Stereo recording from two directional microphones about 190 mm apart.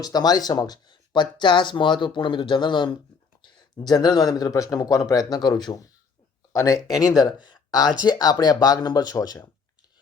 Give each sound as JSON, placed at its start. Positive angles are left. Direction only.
{"t": 0.0, "sound": "speech", "side_deg": 20}
{"t": 6.7, "sound": "speech", "side_deg": 0}
{"t": 7.0, "sound": "speech", "side_deg": 20}